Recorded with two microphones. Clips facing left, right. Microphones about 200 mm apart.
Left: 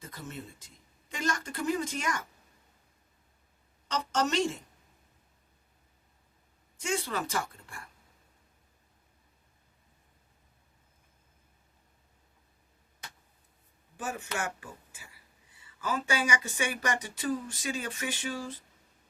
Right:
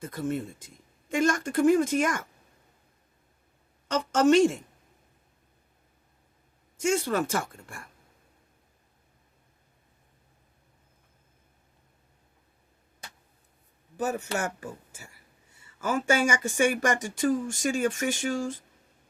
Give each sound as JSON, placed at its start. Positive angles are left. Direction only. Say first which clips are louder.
{"t": 0.0, "sound": "speech", "louder": "right 12 dB", "side_deg": -55}
{"t": 3.8, "sound": "a woman's voice", "louder": "right 9 dB", "side_deg": -50}
{"t": 6.7, "sound": "speech", "louder": "right 7 dB", "side_deg": -45}
{"t": 13.9, "sound": "speech", "louder": "right 7 dB", "side_deg": -40}